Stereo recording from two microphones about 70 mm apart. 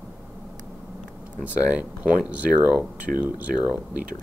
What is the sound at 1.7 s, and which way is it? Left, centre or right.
Speech, centre.